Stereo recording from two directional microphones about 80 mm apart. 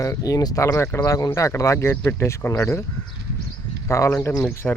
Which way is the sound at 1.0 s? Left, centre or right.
Left.